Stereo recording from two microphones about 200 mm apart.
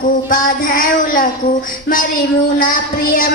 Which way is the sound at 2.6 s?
45° left (ahead or behind).